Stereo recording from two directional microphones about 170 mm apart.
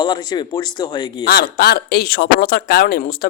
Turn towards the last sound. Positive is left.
turn(degrees=60)  # may be behind; listen again after turning